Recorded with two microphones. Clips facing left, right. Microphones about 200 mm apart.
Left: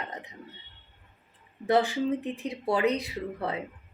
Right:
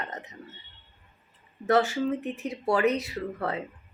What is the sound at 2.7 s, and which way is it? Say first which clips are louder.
Speech: right 2 dB; 15° left (ahead or behind).